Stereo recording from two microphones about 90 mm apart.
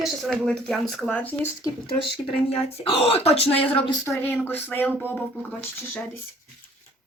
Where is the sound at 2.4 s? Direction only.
90° left.